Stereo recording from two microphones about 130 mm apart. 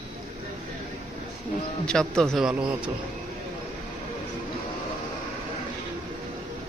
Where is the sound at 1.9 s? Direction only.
5° left (ahead or behind).